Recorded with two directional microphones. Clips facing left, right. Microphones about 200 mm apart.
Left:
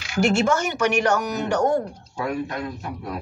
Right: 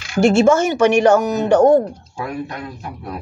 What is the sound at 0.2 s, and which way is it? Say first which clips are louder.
A woman's voice: right 7 dB; 25° right (ahead or behind).